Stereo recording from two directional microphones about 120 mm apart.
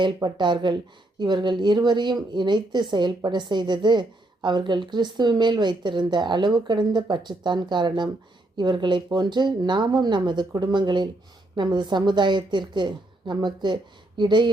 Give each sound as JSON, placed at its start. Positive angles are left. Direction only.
{"t": 0.0, "sound": "a woman's voice", "side_deg": -40}